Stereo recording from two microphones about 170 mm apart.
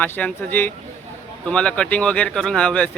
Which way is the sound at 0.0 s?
10° left (ahead or behind).